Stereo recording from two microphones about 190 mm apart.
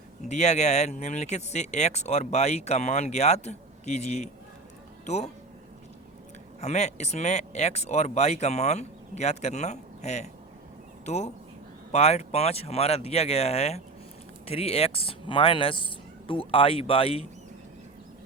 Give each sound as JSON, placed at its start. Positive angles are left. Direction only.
{"t": 0.3, "sound": "speech", "side_deg": 35}
{"t": 6.6, "sound": "speech", "side_deg": 35}